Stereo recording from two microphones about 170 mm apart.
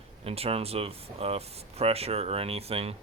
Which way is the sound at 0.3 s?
35° right (ahead or behind).